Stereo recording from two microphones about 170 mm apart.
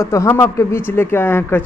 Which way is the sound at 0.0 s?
15° left (ahead or behind).